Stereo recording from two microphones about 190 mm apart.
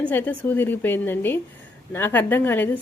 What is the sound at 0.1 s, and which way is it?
Speech, 10° left (ahead or behind).